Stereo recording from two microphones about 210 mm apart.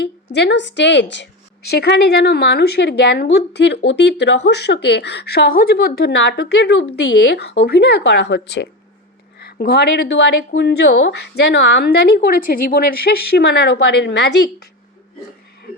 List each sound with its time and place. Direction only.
0.3 s speech: 55° left (ahead or behind)